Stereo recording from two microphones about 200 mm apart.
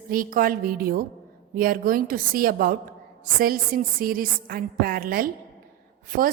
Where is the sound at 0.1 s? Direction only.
45° right (ahead or behind).